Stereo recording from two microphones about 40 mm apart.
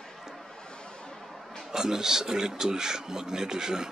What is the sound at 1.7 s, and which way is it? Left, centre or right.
A man's voice, centre.